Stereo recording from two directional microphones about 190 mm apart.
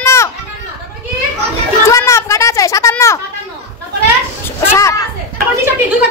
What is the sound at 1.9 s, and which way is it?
A woman's voice, 15° left (ahead or behind).